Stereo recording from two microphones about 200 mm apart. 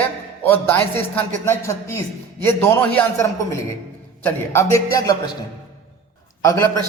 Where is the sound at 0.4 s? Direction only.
10° left (ahead or behind).